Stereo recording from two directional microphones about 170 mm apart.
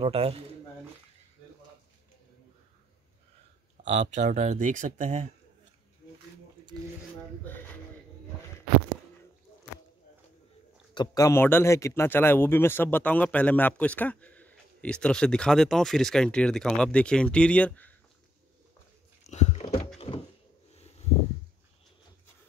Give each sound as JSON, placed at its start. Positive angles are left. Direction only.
{"t": 0.0, "sound": "speech", "side_deg": -35}
{"t": 3.8, "sound": "speech", "side_deg": -45}
{"t": 11.0, "sound": "a man's voice", "side_deg": 20}
{"t": 19.2, "sound": "biting", "side_deg": 45}